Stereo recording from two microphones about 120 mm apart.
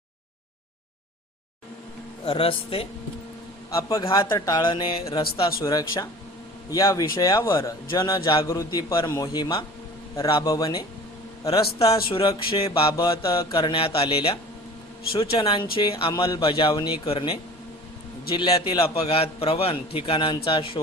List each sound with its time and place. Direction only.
2.2 s a man's voice: 50° left (ahead or behind)
3.7 s a man's voice: 25° left (ahead or behind); by 5.6 s 45° left (ahead or behind)
5.6 s a man's voice: 30° left (ahead or behind)
9.3 s speech: 40° left (ahead or behind)
10.4 s a man's voice: 30° left (ahead or behind)
11.9 s a man's voice: 45° left (ahead or behind)
12.9 s a man's voice: 30° left (ahead or behind)
13.6 s a man's voice: 45° left (ahead or behind)
16.1 s speech: 35° left (ahead or behind)
16.4 s a man's voice: 45° left (ahead or behind)